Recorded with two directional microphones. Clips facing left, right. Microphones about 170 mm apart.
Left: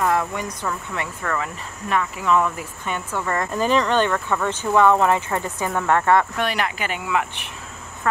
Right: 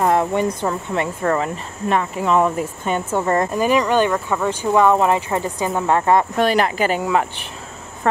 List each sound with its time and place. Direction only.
0.0 s speech: 30° right (ahead or behind)
3.5 s speech: 10° right (ahead or behind)
6.3 s speech: 35° right (ahead or behind)